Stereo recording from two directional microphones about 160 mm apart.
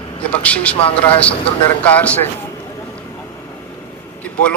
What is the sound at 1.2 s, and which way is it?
A man's voice, 10° left (ahead or behind).